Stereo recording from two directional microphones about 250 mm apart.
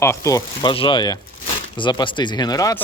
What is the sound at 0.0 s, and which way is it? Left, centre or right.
Speech, centre.